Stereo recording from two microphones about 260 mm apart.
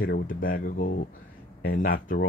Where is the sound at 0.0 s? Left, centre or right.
Left.